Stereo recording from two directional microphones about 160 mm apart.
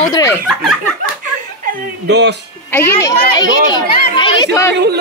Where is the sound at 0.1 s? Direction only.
20° left (ahead or behind).